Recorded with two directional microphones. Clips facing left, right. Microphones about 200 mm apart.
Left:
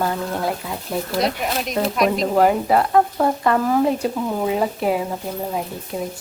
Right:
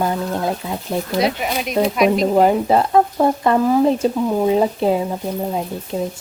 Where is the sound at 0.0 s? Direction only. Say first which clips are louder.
Right 2 dB; 20° right (ahead or behind).